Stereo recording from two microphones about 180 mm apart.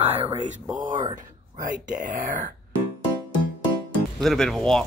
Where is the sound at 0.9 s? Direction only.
25° right (ahead or behind).